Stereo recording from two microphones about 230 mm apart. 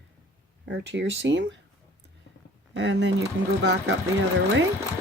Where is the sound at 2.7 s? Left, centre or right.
Right.